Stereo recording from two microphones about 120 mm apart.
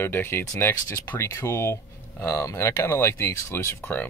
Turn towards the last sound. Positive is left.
turn(degrees=20)  # may be behind; listen again after turning